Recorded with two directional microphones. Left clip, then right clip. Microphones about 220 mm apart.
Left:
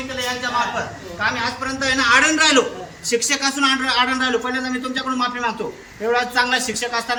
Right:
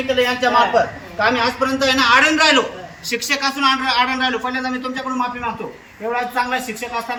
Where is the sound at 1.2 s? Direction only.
35° right (ahead or behind); by 2.6 s 20° right (ahead or behind).